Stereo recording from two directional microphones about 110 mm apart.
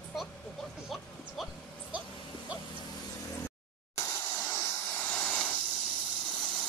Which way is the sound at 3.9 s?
25° left (ahead or behind).